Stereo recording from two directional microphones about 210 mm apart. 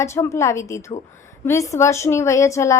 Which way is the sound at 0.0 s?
15° left (ahead or behind).